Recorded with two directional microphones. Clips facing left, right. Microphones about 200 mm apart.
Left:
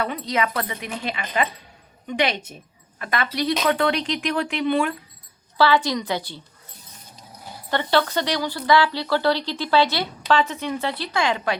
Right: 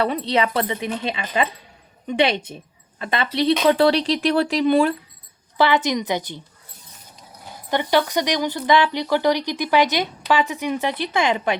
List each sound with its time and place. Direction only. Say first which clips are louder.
0.0 s speech: right 4 dB; 30° right (ahead or behind)
5.5 s speech: right 1 dB; 20° right (ahead or behind)
7.7 s speech: right 2 dB; 15° right (ahead or behind)